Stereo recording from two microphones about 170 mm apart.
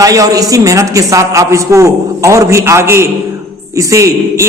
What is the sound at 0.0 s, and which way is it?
A man's voice, 20° right (ahead or behind).